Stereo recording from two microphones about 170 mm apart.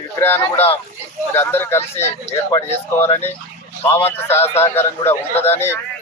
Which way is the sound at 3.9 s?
15° left (ahead or behind).